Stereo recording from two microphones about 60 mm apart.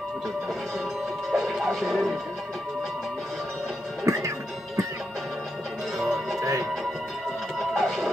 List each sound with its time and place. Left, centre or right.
1.3 s music: centre
4.0 s music: right
5.9 s music: centre
7.5 s music: centre